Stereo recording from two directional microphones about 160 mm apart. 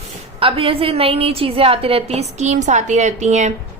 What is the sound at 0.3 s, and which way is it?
A woman's voice, 35° right (ahead or behind).